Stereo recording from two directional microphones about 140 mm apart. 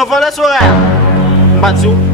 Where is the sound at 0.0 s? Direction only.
Centre (ahead or behind).